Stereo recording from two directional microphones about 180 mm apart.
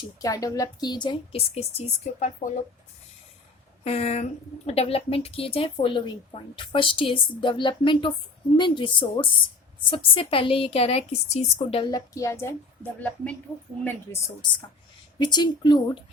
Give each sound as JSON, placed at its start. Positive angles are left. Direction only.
{"t": 0.2, "sound": "a woman's voice", "side_deg": 20}
{"t": 3.8, "sound": "a woman's voice", "side_deg": 35}